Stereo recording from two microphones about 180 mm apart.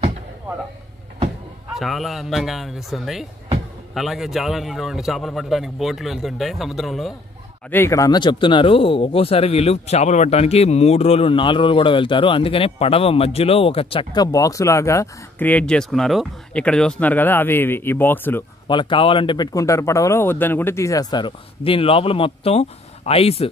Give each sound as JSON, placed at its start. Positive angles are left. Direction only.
{"t": 1.8, "sound": "speech", "side_deg": 0}
{"t": 7.7, "sound": "speech", "side_deg": 15}
{"t": 18.7, "sound": "speech", "side_deg": 25}